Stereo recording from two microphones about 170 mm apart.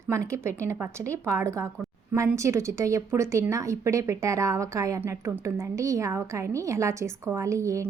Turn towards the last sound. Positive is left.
turn(degrees=-20)  # may be behind; listen again after turning